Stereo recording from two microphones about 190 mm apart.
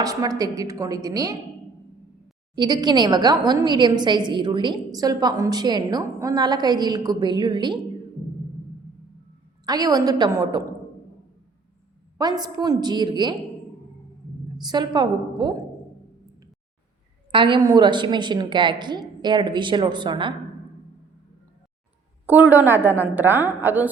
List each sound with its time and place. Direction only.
0.0 s a woman's voice: 20° right (ahead or behind)
2.6 s a woman's voice: 20° right (ahead or behind)
9.6 s a woman's voice: 20° right (ahead or behind)
12.1 s a woman's voice: 20° right (ahead or behind)
14.6 s a woman's voice: 20° right (ahead or behind)
17.3 s a woman's voice: 25° right (ahead or behind)
22.3 s a woman's voice: 10° right (ahead or behind)